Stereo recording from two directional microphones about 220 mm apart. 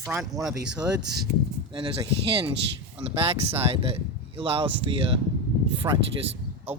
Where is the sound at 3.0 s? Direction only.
25° right (ahead or behind).